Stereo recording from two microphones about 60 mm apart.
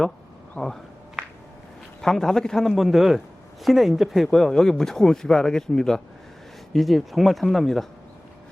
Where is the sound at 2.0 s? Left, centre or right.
Centre.